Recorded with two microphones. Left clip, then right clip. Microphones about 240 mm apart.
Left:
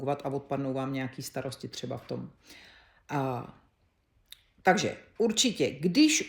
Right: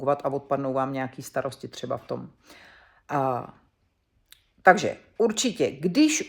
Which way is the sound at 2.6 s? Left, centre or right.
Centre.